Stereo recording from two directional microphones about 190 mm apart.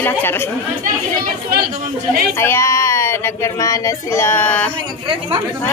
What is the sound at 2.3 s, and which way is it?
Speech, 15° left (ahead or behind).